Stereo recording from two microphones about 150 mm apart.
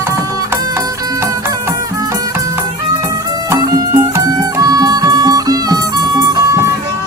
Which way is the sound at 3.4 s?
25° right (ahead or behind).